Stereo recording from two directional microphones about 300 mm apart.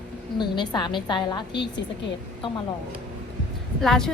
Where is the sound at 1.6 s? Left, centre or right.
Left.